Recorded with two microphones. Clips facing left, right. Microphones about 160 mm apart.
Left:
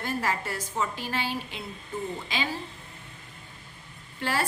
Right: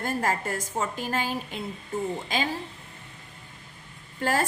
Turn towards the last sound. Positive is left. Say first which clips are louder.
# right 3 dB
turn(degrees=-45)  # may be behind; listen again after turning